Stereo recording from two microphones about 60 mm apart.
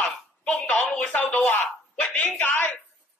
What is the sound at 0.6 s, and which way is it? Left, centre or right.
Speech, left.